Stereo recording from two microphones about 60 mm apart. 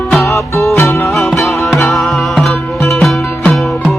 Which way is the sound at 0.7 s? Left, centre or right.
Left.